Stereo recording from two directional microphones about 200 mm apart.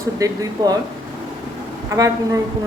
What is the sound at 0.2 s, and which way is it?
Speech, 20° right (ahead or behind).